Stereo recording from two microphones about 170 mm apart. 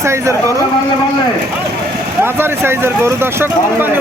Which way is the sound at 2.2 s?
15° right (ahead or behind).